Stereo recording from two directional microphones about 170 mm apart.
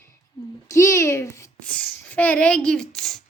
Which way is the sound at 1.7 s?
10° left (ahead or behind).